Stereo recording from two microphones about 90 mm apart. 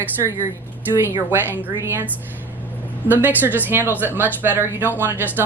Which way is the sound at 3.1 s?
20° right (ahead or behind).